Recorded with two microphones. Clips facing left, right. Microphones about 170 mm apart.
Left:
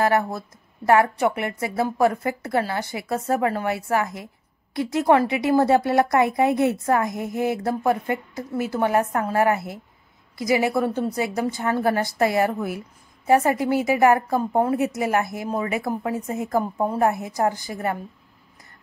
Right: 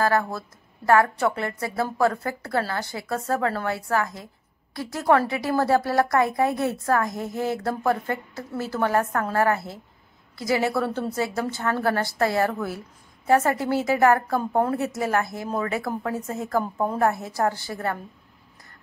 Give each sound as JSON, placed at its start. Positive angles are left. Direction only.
{"t": 0.0, "sound": "a woman's voice", "side_deg": 20}